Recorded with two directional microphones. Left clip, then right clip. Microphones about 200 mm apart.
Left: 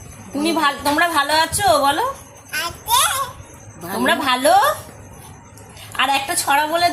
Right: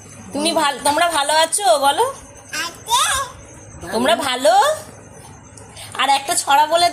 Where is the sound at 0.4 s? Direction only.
45° right (ahead or behind).